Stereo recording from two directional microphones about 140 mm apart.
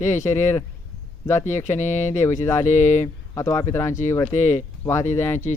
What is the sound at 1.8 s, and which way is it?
Speech, 60° left (ahead or behind).